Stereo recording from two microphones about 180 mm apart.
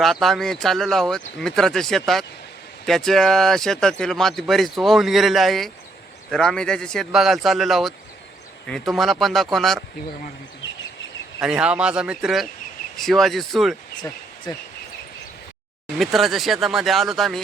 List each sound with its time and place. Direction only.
0.0 s speech: centre (ahead or behind)
11.3 s speech: 5° right (ahead or behind)
14.5 s speech: 25° left (ahead or behind)
16.0 s speech: centre (ahead or behind)